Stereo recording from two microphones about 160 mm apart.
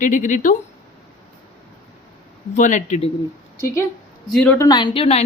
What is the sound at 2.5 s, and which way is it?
Speech, 50° left (ahead or behind).